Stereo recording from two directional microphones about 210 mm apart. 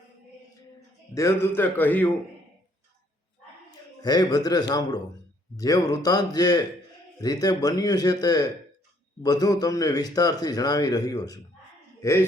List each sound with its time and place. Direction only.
1.1 s a man's voice: 15° left (ahead or behind)
4.0 s a man's voice: 20° left (ahead or behind)